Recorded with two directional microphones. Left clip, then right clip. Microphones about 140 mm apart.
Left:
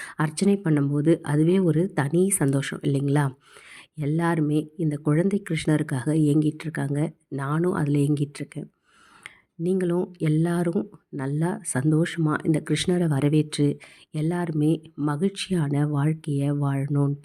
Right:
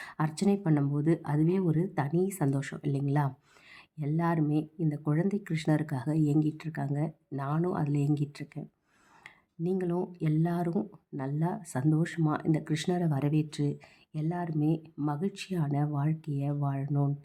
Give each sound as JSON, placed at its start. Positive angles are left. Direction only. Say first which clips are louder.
{"t": 0.0, "sound": "speech", "louder": "left 6 dB", "side_deg": 25}
{"t": 9.2, "sound": "a sound", "louder": "left 7 dB", "side_deg": 25}
{"t": 10.1, "sound": "speech", "louder": "left 7 dB", "side_deg": 25}